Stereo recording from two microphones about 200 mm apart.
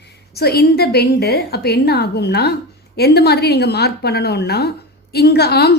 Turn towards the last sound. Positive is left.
turn(degrees=55)  # may be behind; listen again after turning